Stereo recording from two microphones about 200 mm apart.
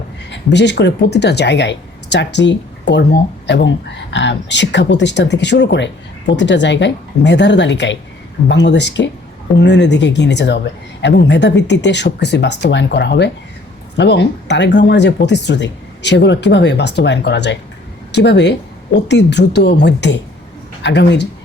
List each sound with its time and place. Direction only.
0.3 s speech: 60° left (ahead or behind)